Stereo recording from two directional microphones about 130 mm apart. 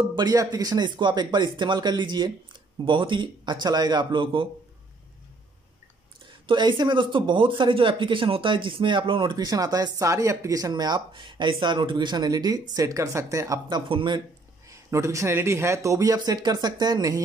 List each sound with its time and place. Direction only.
0.1 s speech: 30° right (ahead or behind)
6.4 s speech: 35° right (ahead or behind)
14.7 s speech: 25° right (ahead or behind)